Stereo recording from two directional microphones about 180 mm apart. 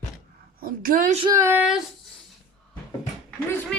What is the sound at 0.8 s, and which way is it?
Child singing, 50° right (ahead or behind).